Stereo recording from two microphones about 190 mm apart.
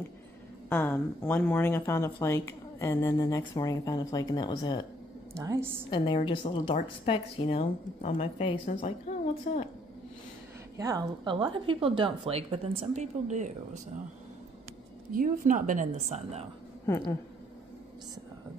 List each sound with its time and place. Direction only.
0.7 s speech: 10° left (ahead or behind)
5.3 s a woman's voice: 15° right (ahead or behind)
5.9 s a woman's voice: 25° left (ahead or behind)
10.8 s speech: 20° right (ahead or behind); by 13.5 s 40° right (ahead or behind)
15.1 s a woman's voice: 45° right (ahead or behind)
16.8 s speech: 15° left (ahead or behind)